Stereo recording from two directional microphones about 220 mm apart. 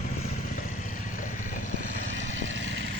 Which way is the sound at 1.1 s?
35° left (ahead or behind).